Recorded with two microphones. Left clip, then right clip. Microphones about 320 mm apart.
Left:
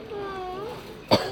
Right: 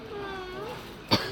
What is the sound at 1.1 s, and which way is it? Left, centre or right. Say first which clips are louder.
Cough: left 5 dB; centre.